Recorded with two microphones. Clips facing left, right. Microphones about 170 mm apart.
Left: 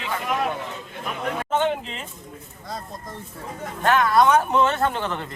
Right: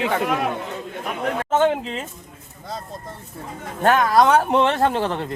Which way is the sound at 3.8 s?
40° right (ahead or behind).